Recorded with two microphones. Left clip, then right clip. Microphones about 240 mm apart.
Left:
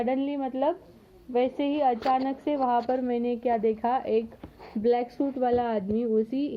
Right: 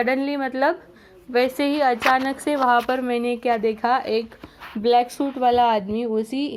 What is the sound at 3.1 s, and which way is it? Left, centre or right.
Speech, centre.